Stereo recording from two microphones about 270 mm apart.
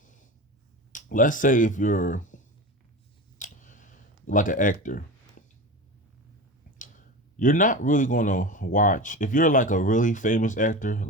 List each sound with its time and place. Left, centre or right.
0.9 s speech: left
3.3 s a sound: left
6.7 s speech: left